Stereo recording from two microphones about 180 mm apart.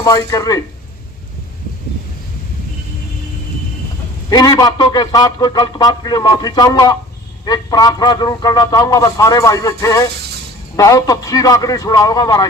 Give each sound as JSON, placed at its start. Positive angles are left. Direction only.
{"t": 0.0, "sound": "a man's voice", "side_deg": 20}
{"t": 4.3, "sound": "a man's voice", "side_deg": 20}